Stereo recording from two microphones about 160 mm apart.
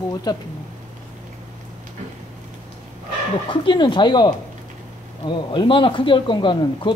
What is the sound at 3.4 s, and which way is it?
Speech, 30° left (ahead or behind).